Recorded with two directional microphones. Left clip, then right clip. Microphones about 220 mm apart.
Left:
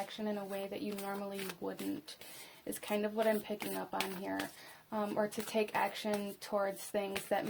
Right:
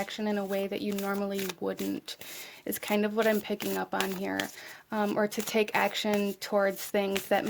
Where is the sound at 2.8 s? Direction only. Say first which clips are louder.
Right 6 dB; 45° right (ahead or behind).